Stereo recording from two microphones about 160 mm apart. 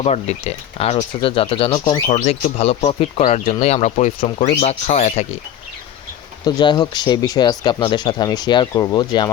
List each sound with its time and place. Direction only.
0.0 s speech: 40° left (ahead or behind); by 2.0 s 25° left (ahead or behind)
2.0 s speech: 45° left (ahead or behind)
6.4 s speech: 25° left (ahead or behind)